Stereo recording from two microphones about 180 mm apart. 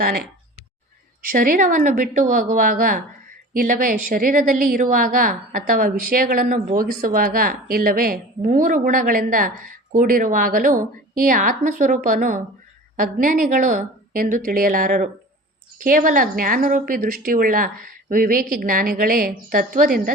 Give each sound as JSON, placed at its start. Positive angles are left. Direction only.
{"t": 1.3, "sound": "a woman's voice", "side_deg": -50}